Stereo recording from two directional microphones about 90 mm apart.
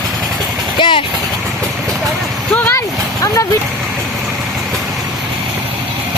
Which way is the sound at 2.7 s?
35° left (ahead or behind).